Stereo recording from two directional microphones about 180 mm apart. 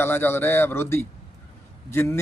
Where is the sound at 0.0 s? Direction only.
10° left (ahead or behind).